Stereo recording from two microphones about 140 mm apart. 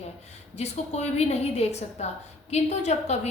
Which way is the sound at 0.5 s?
50° left (ahead or behind).